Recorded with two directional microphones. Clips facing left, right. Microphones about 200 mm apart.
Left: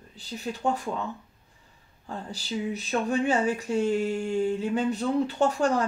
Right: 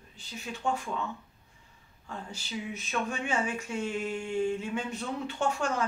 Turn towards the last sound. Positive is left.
turn(degrees=35)  # may be behind; listen again after turning